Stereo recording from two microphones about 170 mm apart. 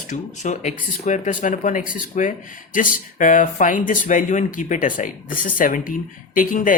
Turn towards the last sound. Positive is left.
turn(degrees=55)  # may be behind; listen again after turning